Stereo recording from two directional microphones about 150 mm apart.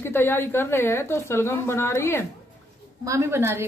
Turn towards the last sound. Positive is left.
turn(degrees=-15)  # may be behind; listen again after turning